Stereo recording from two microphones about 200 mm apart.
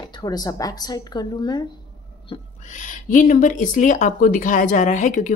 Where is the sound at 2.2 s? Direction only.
30° left (ahead or behind).